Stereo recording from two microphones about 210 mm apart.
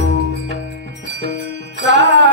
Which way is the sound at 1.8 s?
55° right (ahead or behind).